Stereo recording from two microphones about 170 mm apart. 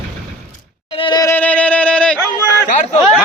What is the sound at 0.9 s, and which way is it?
Yodeling, 30° left (ahead or behind).